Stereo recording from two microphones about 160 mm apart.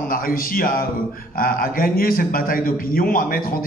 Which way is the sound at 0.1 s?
65° left (ahead or behind).